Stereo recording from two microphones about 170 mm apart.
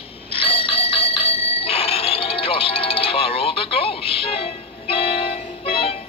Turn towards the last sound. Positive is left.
turn(degrees=35)  # may be behind; listen again after turning